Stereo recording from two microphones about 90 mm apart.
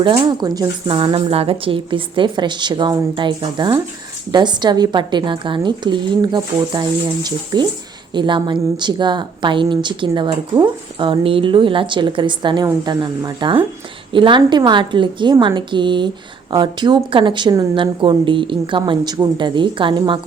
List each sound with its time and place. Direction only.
0.0 s speech: 60° right (ahead or behind)
0.9 s a woman's voice: 80° right; by 10.6 s 65° right (ahead or behind)
10.9 s a woman's voice: 75° right (ahead or behind)